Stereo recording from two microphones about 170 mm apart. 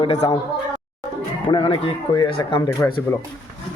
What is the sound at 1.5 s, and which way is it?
Speech, 30° left (ahead or behind).